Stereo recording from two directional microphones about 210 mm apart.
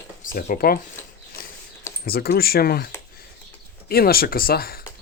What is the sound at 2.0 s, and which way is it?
Speech, 45° left (ahead or behind).